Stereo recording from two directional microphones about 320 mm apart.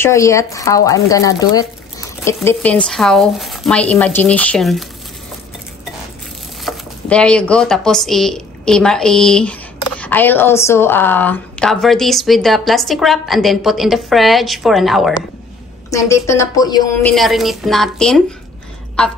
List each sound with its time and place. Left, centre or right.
0.0 s speech: centre
6.6 s a woman's voice: centre
17.1 s speech: centre